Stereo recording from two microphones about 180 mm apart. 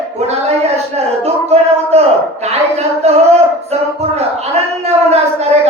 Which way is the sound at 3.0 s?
35° right (ahead or behind).